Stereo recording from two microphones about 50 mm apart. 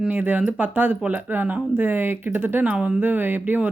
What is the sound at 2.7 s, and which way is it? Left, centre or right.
Speech, centre.